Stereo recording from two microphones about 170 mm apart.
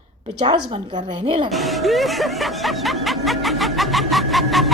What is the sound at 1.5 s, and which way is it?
Speech, centre (ahead or behind).